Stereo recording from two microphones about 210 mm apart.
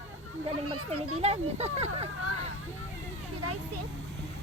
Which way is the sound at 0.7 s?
90° right.